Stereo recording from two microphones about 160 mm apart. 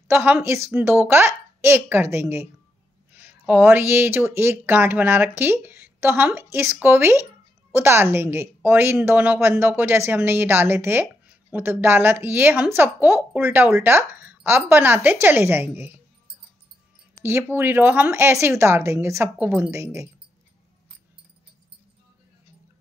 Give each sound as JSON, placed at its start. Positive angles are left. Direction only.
{"t": 0.1, "sound": "a woman's voice", "side_deg": -15}
{"t": 17.2, "sound": "a woman's voice", "side_deg": -15}